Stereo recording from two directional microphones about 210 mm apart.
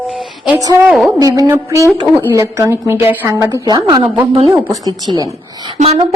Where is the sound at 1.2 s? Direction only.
15° right (ahead or behind).